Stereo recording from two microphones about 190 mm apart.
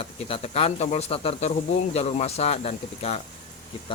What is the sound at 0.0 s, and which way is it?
Speech, 30° left (ahead or behind).